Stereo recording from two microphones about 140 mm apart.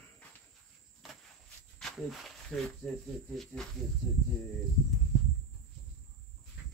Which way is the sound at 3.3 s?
5° left (ahead or behind).